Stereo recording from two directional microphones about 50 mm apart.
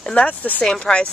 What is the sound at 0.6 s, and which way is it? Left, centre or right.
Speech, centre.